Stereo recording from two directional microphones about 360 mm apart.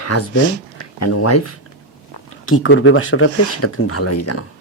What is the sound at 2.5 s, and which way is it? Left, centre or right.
Speech, left.